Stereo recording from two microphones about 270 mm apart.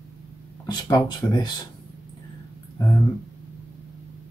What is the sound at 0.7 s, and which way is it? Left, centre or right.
Speech, centre.